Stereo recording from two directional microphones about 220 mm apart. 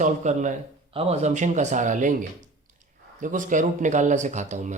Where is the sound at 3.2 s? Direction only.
35° right (ahead or behind).